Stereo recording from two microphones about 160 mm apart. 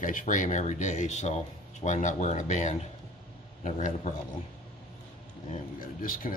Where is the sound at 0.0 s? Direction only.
55° left (ahead or behind).